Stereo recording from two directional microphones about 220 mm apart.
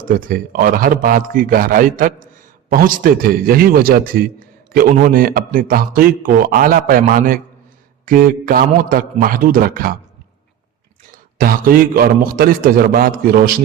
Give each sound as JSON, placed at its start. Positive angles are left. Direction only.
{"t": 0.3, "sound": "speech", "side_deg": -40}
{"t": 11.3, "sound": "speech", "side_deg": -40}